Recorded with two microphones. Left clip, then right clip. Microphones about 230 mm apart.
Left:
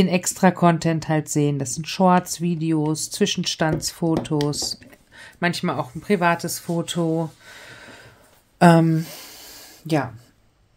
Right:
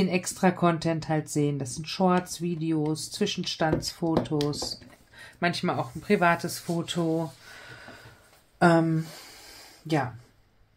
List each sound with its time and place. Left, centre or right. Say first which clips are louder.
0.0 s speech: left 6 dB; left
8.5 s speech: left 6 dB; left